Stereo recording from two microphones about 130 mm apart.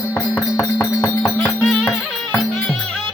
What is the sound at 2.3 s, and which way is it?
Music, 5° left (ahead or behind).